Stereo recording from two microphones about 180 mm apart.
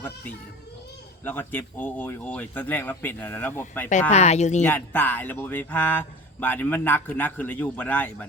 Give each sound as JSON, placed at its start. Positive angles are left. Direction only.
{"t": 1.2, "sound": "speech", "side_deg": 10}
{"t": 4.1, "sound": "speech", "side_deg": 35}
{"t": 4.6, "sound": "speech", "side_deg": 10}